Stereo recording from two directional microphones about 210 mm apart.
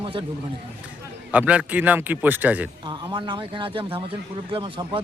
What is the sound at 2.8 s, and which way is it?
Speech, 20° right (ahead or behind).